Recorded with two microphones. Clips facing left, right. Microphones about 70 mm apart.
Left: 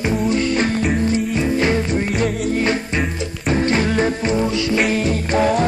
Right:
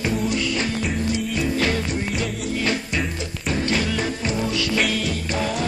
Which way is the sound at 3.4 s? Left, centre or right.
Left.